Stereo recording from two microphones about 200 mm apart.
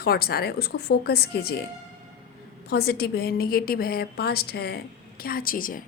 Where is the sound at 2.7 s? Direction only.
55° left (ahead or behind).